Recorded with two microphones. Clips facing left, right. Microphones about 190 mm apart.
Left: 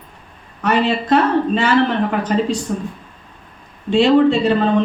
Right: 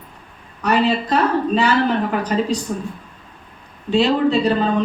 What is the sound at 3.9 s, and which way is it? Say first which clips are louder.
Speech: left 4 dB; 40° right (ahead or behind).